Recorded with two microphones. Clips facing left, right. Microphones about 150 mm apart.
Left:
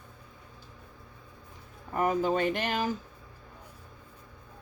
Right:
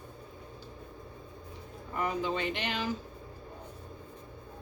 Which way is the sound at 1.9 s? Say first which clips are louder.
Left 5 dB; 45° left (ahead or behind).